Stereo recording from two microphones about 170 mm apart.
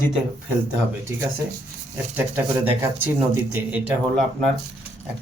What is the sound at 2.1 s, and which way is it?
Speech, 10° right (ahead or behind).